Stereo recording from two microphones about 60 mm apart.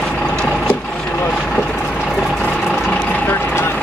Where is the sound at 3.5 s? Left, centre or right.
Left.